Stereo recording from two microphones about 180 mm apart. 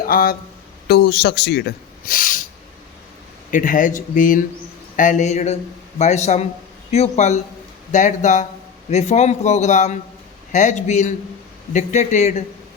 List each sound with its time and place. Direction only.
0.0 s speech: 55° left (ahead or behind)
0.9 s speech: 65° left (ahead or behind); by 2.4 s 50° left (ahead or behind)
3.5 s a man's voice: 45° left (ahead or behind)